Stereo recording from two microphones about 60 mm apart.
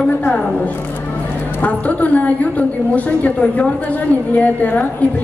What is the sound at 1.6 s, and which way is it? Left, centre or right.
A woman's voice, left.